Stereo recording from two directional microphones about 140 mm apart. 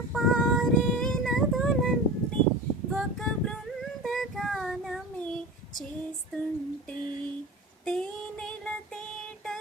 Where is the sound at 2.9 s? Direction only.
5° left (ahead or behind).